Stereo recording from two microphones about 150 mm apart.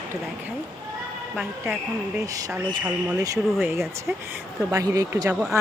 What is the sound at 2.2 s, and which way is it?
A woman's voice, 20° right (ahead or behind).